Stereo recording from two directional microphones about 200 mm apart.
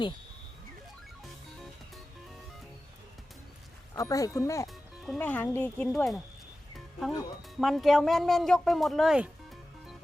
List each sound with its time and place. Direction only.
3.9 s speech: 15° left (ahead or behind)
4.7 s speech: centre (ahead or behind)
7.6 s speech: centre (ahead or behind)